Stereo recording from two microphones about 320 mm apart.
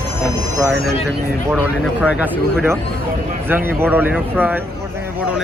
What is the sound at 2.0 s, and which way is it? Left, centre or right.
Speech, centre.